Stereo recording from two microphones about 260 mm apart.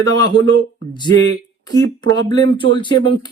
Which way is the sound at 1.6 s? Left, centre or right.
Centre.